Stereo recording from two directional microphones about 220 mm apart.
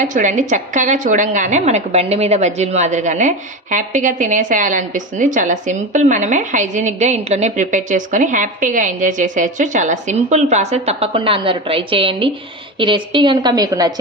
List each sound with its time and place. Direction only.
0.0 s a woman's voice: 35° right (ahead or behind); by 14.0 s 15° right (ahead or behind)